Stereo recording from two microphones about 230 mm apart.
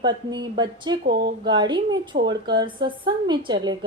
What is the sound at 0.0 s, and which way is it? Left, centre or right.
A woman's voice, centre.